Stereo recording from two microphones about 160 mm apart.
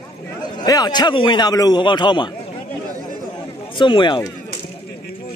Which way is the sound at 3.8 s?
30° left (ahead or behind).